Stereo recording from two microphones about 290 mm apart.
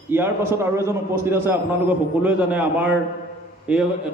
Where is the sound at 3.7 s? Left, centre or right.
Centre.